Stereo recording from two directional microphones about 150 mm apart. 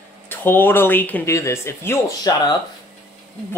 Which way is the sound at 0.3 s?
15° left (ahead or behind).